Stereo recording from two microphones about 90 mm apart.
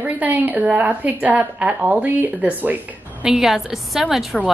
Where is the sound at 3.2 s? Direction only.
5° right (ahead or behind).